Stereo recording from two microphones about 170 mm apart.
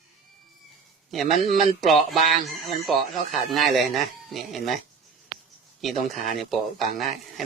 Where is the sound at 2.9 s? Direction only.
Centre (ahead or behind).